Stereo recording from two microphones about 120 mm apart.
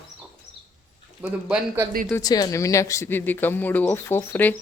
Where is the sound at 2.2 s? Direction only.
35° left (ahead or behind).